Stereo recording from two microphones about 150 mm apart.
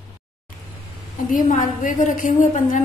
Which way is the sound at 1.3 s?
60° left (ahead or behind).